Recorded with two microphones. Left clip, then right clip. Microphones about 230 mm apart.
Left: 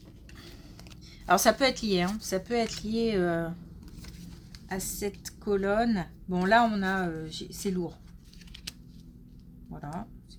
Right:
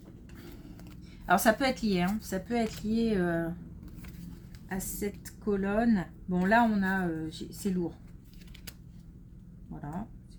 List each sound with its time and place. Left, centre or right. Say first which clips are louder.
1.3 s a woman's voice: left 2 dB; left
4.7 s a woman's voice: left 2 dB; left